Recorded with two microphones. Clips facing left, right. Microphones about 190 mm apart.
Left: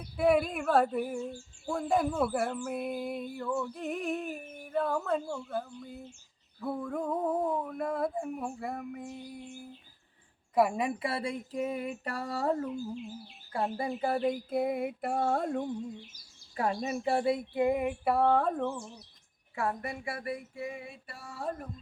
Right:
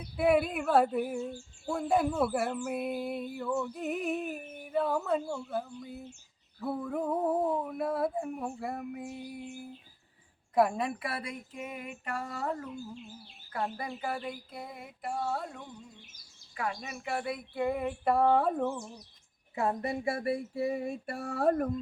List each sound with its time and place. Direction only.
0.2 s speech: 5° right (ahead or behind)
10.5 s speech: 5° left (ahead or behind)
10.8 s a sound: 25° left (ahead or behind); by 15.8 s 50° left (ahead or behind)
16.6 s speech: 35° left (ahead or behind); by 17.9 s 15° left (ahead or behind)
18.0 s speech: centre (ahead or behind)
19.5 s a sound: 20° right (ahead or behind); by 21.7 s 60° right (ahead or behind)